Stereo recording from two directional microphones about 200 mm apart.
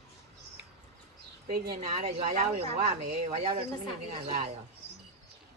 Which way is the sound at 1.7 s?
35° right (ahead or behind).